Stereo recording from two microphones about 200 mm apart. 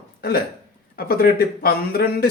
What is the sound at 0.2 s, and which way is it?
Hiccup, 50° left (ahead or behind).